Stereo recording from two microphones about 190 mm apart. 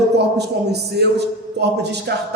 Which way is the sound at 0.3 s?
60° right (ahead or behind).